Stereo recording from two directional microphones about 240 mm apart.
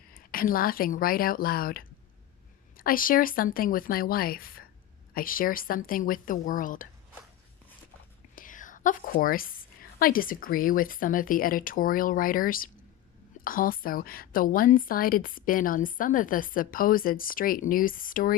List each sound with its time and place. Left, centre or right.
0.1 s a woman's voice: left
8.4 s a woman's voice: left